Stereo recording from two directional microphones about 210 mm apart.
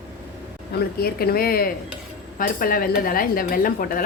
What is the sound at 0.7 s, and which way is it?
Speech, 45° left (ahead or behind).